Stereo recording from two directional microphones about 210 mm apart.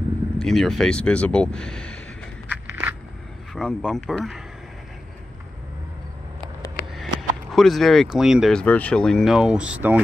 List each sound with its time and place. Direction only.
0.4 s speech: centre (ahead or behind)
2.4 s walk: 10° right (ahead or behind)
3.5 s speech: 5° left (ahead or behind)
7.0 s speech: centre (ahead or behind)